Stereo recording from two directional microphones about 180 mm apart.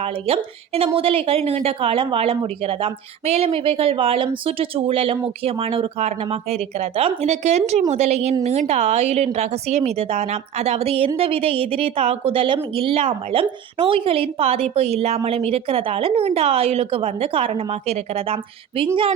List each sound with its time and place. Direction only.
0.0 s a woman's voice: 30° right (ahead or behind)